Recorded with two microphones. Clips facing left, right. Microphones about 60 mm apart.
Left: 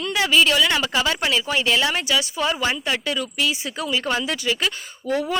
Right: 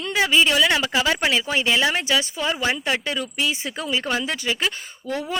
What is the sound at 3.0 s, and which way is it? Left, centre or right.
Speech, right.